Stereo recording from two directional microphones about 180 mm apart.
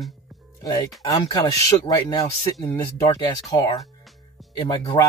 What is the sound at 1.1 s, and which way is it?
Speech, 25° left (ahead or behind).